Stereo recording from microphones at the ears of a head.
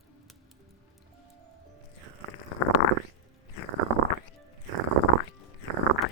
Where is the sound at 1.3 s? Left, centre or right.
Right.